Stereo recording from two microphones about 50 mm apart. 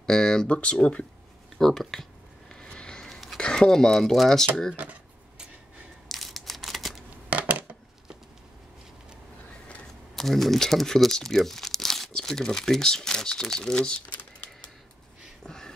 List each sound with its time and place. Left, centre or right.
0.0 s speech: centre
0.5 s speech: left
1.6 s speech: centre
2.5 s vehicle: centre
3.3 s speech: centre
4.8 s speech: right
6.0 s a sound: centre
7.2 s a sound: right
10.1 s speech: centre
15.4 s a sound: centre